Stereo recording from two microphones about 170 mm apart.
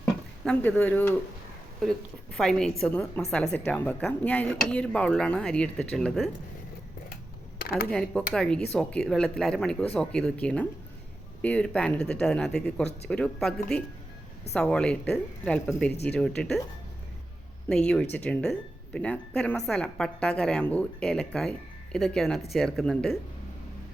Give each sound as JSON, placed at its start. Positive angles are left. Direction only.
{"t": 0.4, "sound": "speech", "side_deg": 5}
{"t": 7.6, "sound": "a sound", "side_deg": 60}
{"t": 7.9, "sound": "speech", "side_deg": 5}
{"t": 17.7, "sound": "speech", "side_deg": 5}